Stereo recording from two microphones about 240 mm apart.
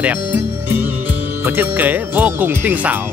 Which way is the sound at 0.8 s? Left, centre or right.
Centre.